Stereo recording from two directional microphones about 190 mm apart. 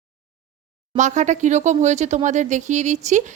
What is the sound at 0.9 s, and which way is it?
Speech, 40° right (ahead or behind).